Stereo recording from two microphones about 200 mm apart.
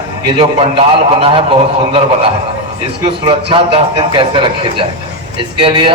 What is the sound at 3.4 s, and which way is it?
A man's voice, 25° right (ahead or behind).